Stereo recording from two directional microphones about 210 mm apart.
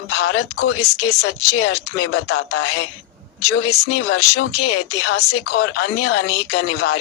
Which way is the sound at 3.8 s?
85° left.